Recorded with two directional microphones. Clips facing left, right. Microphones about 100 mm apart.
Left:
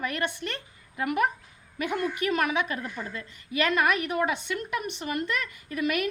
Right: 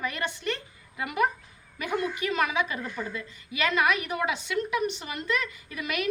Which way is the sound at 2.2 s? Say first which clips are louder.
Left 2 dB; 50° left (ahead or behind).